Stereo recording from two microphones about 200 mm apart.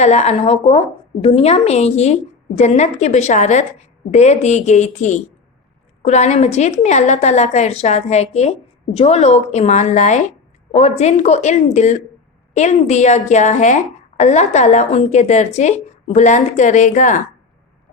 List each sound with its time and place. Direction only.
0.0 s a woman's voice: 35° left (ahead or behind)